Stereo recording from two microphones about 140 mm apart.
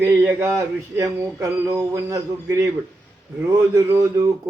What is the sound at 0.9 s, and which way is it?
A man's voice, 20° right (ahead or behind).